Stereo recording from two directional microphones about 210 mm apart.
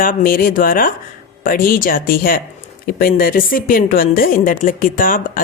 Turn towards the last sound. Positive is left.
turn(degrees=40)  # may be behind; listen again after turning